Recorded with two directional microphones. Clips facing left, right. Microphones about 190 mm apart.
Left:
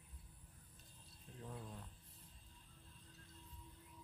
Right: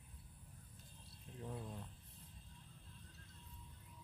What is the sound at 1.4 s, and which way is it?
Speech, 20° right (ahead or behind).